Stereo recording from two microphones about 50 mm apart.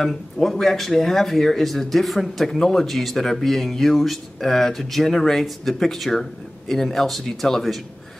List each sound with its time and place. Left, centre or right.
0.0 s speech: centre